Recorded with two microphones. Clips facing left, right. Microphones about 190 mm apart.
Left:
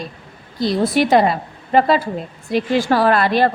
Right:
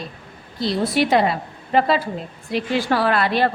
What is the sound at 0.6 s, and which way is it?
A woman's voice, 45° left (ahead or behind).